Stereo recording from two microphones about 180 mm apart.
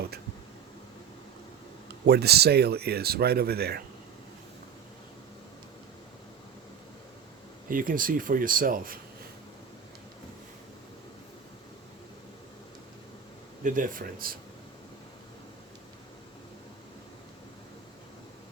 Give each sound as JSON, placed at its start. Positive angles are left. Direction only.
{"t": 2.0, "sound": "speech", "side_deg": -65}
{"t": 7.7, "sound": "speech", "side_deg": -50}
{"t": 13.7, "sound": "speech", "side_deg": -45}